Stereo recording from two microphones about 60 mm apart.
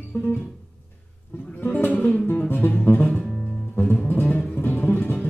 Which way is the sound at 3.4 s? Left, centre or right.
Centre.